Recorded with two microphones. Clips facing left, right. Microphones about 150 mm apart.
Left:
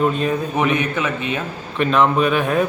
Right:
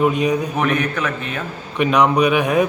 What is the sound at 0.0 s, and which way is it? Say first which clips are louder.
Speech: right 2 dB; 15° right (ahead or behind).